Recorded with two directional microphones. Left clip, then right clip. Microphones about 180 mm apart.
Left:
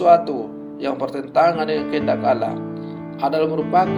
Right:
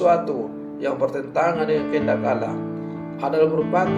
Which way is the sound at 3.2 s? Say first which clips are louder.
Even; 45° left (ahead or behind).